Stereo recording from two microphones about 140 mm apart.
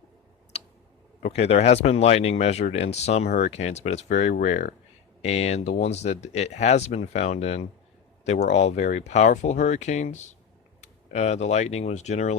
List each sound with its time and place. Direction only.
1.2 s speech: 50° left (ahead or behind)